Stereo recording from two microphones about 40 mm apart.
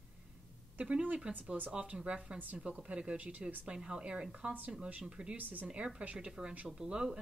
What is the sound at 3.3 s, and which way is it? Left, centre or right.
Speech, right.